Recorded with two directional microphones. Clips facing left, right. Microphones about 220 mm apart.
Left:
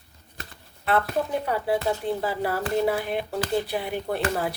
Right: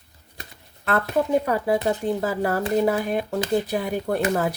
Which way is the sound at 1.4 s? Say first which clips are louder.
Right 3 dB; 45° right (ahead or behind).